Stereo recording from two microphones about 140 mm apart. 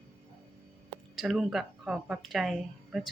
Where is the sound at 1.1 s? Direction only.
Centre (ahead or behind).